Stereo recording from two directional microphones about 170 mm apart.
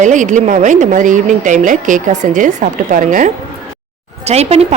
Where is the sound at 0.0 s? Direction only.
45° right (ahead or behind).